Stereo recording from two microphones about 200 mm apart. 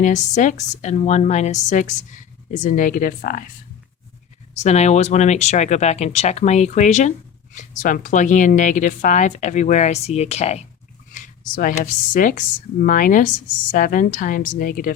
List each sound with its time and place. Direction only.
0.0 s speech: 40° left (ahead or behind)
4.5 s speech: 35° left (ahead or behind)